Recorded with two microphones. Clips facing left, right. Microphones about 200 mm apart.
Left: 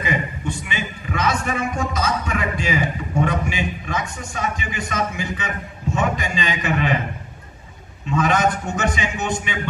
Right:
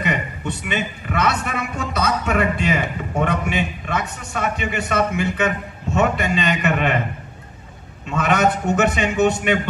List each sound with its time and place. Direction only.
0.0 s a man's voice: 65° right (ahead or behind)
8.1 s a man's voice: 65° right (ahead or behind)